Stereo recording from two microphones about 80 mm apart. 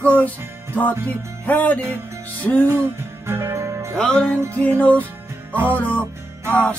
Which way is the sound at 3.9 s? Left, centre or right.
Centre.